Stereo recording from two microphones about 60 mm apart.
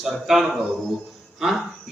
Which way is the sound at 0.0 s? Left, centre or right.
Centre.